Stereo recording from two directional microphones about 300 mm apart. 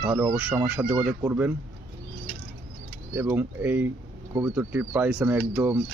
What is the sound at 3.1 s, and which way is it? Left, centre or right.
Speech, centre.